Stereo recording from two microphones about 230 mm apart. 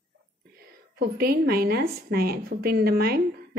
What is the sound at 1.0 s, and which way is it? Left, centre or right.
A woman's voice, right.